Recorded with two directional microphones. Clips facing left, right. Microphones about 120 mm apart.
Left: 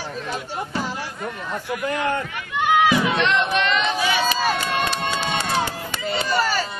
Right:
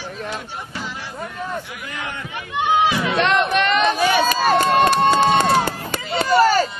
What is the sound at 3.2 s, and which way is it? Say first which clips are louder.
Crowd: right 3 dB; 50° right (ahead or behind).